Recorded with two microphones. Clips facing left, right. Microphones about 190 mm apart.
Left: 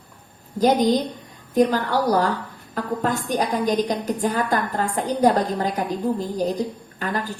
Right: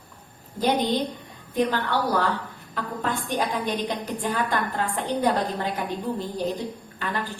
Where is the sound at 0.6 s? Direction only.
40° left (ahead or behind).